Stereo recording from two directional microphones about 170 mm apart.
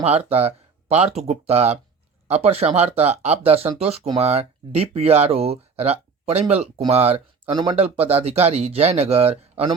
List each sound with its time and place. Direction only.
0.0 s speech: 35° right (ahead or behind)